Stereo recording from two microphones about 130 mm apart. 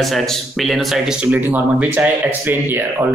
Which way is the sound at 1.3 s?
15° right (ahead or behind).